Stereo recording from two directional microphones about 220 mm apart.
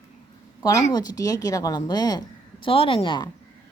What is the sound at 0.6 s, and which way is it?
A woman's voice, 15° left (ahead or behind).